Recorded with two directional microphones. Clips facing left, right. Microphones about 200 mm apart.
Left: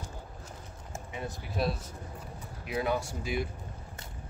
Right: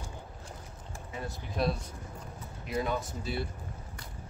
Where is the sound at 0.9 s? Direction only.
20° left (ahead or behind).